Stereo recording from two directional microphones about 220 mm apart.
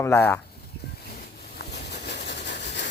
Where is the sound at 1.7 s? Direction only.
50° left (ahead or behind).